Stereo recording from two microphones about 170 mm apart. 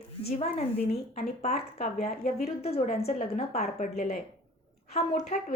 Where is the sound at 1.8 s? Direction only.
40° left (ahead or behind).